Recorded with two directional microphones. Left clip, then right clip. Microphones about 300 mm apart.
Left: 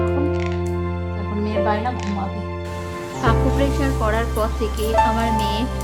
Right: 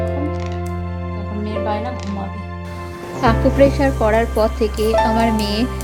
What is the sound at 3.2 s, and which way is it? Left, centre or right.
Speech, centre.